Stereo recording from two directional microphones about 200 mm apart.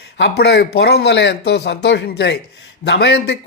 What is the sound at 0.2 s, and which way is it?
A man's voice, 55° left (ahead or behind).